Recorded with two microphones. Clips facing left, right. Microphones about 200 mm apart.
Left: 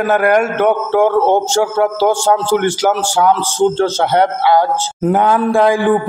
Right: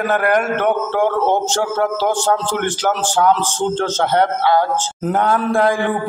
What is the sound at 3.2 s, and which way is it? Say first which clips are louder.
A man's voice: left 4 dB; 10° left (ahead or behind).